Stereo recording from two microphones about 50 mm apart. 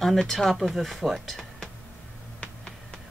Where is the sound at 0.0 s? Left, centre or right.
Centre.